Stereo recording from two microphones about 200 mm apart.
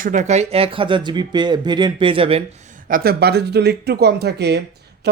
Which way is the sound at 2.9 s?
50° right (ahead or behind).